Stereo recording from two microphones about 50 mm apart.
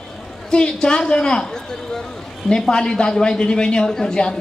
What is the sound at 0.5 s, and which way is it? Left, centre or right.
A man's voice, centre.